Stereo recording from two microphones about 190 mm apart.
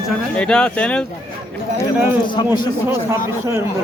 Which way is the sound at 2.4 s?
25° left (ahead or behind).